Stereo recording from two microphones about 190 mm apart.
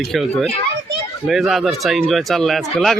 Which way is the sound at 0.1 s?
Centre (ahead or behind).